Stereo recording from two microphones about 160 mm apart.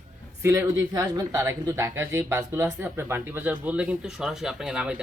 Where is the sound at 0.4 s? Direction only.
15° right (ahead or behind).